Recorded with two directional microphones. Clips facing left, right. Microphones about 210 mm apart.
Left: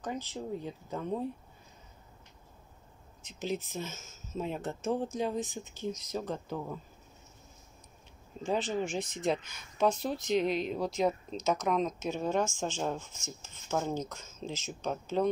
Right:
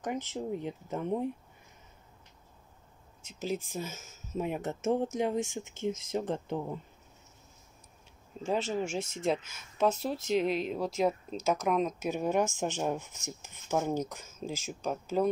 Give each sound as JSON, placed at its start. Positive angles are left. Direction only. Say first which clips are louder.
{"t": 0.0, "sound": "speech", "louder": "right 3 dB", "side_deg": -20}
{"t": 3.3, "sound": "speech", "louder": "right 1 dB", "side_deg": -5}
{"t": 8.4, "sound": "speech", "louder": "even", "side_deg": -5}